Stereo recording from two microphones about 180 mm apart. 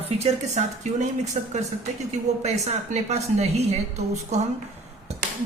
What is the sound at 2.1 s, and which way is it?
A woman's voice, 40° right (ahead or behind).